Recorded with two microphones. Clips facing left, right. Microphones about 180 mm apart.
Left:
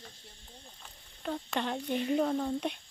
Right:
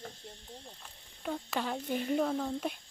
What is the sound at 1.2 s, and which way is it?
Speech, 5° right (ahead or behind).